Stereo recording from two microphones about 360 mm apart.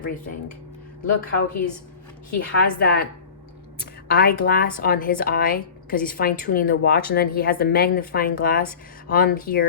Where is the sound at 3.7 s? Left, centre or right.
Left.